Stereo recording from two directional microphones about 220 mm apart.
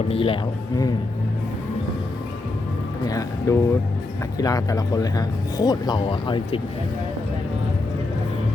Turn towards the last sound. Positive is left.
turn(degrees=25)  # may be behind; listen again after turning